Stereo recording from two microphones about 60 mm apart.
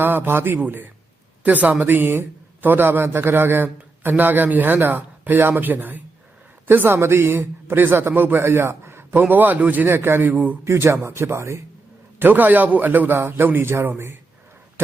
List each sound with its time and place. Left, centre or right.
0.0 s a man's voice: right
9.2 s a man's voice: right
10.7 s speech: right
12.2 s a man's voice: right